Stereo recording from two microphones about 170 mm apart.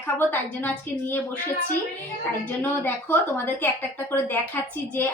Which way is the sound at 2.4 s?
10° left (ahead or behind).